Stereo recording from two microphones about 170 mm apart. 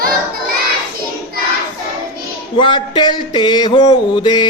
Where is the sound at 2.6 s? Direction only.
25° left (ahead or behind).